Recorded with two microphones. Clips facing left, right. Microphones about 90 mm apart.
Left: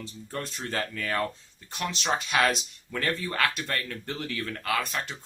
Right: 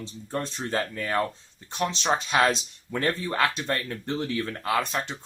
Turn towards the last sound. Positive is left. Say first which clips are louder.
# right 3 dB
turn(degrees=-25)  # may be behind; listen again after turning